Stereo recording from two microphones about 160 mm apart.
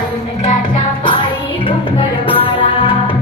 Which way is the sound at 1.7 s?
35° left (ahead or behind).